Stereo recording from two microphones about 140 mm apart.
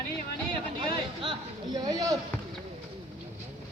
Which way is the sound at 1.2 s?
30° right (ahead or behind).